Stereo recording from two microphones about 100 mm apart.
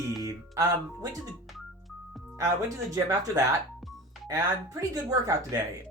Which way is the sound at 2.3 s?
30° right (ahead or behind).